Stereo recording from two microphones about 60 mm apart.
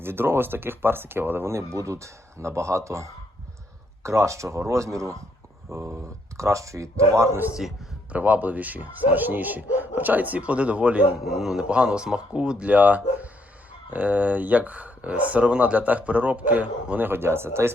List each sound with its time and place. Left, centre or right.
0.0 s speech: right
1.5 s speech: right
8.1 s speech: right
11.3 s a man's voice: centre
11.7 s speech: centre
17.1 s speech: right